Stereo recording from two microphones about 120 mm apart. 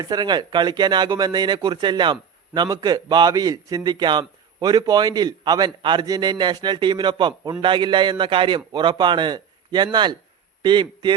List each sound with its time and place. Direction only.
0.0 s a man's voice: 35° right (ahead or behind)